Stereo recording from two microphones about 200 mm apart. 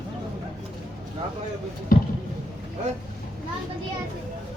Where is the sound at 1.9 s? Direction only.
45° left (ahead or behind).